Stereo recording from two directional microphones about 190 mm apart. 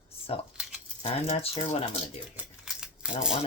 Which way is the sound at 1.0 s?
35° left (ahead or behind).